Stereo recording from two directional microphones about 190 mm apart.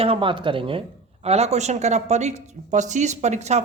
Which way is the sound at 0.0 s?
30° right (ahead or behind).